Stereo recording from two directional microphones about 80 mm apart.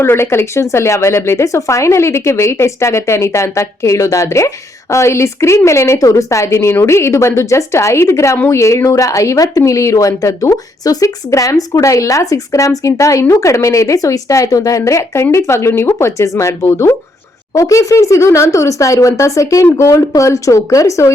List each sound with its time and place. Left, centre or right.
0.0 s a woman's voice: left